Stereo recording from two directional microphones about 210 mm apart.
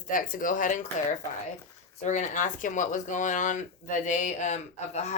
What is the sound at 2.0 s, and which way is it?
Speech, 35° left (ahead or behind).